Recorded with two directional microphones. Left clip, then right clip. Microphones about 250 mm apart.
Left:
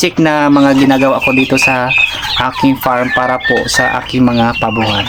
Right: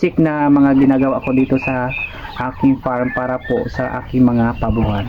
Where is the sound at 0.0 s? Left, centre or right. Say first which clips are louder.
Left 5 dB; centre.